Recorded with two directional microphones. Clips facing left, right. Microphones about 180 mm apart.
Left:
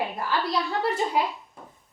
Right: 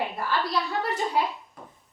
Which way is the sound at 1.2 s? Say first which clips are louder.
Right 1 dB; 15° left (ahead or behind).